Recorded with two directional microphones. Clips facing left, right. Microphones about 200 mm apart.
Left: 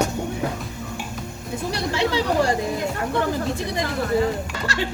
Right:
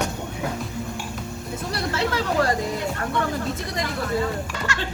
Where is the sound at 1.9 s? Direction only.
15° left (ahead or behind).